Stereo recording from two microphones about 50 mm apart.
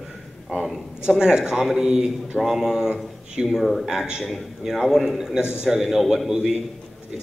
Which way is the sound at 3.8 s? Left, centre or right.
Centre.